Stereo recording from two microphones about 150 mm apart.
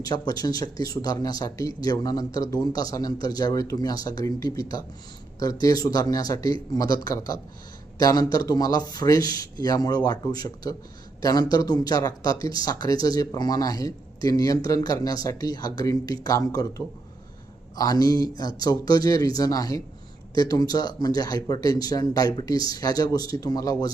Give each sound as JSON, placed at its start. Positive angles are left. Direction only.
{"t": 0.0, "sound": "speech", "side_deg": 25}